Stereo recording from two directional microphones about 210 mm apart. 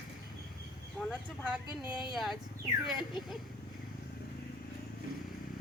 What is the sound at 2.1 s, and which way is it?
Speech, centre (ahead or behind).